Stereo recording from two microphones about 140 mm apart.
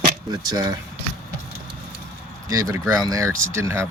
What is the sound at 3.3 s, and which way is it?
Speech, 70° right (ahead or behind).